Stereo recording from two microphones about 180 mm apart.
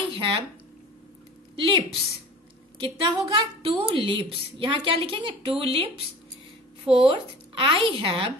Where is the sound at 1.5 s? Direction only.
30° right (ahead or behind).